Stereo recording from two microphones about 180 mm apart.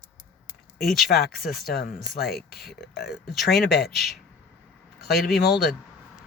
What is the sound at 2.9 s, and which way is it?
Speech, 60° left (ahead or behind).